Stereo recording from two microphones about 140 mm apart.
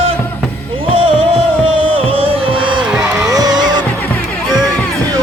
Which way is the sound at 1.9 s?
40° right (ahead or behind).